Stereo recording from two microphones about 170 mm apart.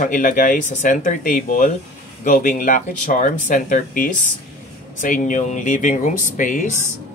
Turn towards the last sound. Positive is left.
turn(degrees=50)  # may be behind; listen again after turning